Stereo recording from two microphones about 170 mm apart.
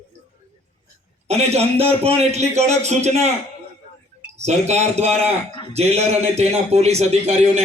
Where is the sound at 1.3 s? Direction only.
40° right (ahead or behind).